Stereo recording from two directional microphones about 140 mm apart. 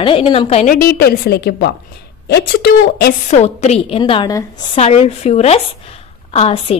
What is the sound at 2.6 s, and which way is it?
Speech, 90° left.